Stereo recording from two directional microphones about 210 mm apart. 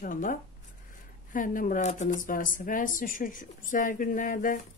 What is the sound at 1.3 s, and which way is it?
A woman's voice, 40° left (ahead or behind).